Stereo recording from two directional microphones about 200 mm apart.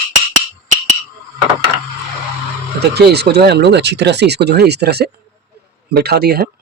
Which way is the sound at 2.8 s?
55° right (ahead or behind).